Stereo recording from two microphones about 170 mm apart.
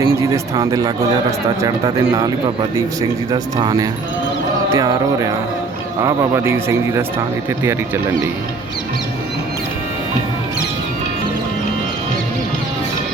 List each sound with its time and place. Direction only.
0.0 s speech: 20° right (ahead or behind)
3.3 s speech: 25° right (ahead or behind)